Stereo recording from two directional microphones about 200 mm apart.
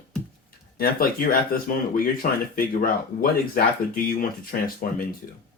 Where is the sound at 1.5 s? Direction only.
45° left (ahead or behind).